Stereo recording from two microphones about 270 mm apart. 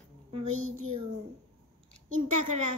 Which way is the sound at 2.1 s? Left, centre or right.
Right.